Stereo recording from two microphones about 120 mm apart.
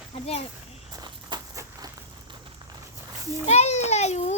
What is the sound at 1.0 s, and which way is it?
Walk, 35° right (ahead or behind).